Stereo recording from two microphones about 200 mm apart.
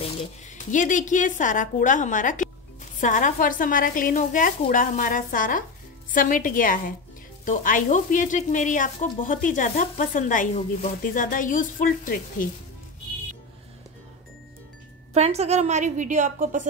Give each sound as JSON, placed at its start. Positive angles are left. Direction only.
{"t": 0.5, "sound": "sizzle", "side_deg": 40}
{"t": 3.0, "sound": "a woman's voice", "side_deg": 40}
{"t": 7.4, "sound": "sizzle", "side_deg": 40}
{"t": 15.1, "sound": "a woman's voice", "side_deg": -30}